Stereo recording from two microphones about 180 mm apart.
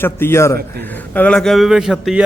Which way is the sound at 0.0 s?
15° left (ahead or behind).